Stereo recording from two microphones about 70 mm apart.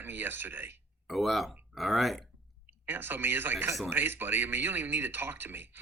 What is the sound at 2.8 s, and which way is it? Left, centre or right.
Speech, right.